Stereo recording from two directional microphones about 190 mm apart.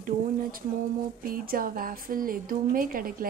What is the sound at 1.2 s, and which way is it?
A woman's voice, 50° right (ahead or behind).